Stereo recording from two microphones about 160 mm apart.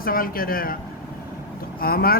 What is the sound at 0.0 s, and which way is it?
Speech, 65° left (ahead or behind).